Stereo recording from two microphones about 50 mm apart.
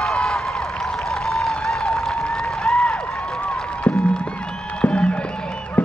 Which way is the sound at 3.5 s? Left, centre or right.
Centre.